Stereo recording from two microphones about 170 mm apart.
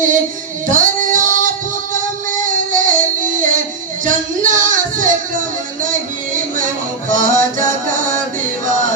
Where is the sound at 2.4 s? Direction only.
50° right (ahead or behind).